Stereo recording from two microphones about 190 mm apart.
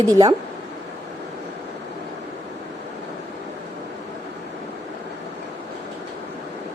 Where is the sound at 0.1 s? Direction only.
20° right (ahead or behind).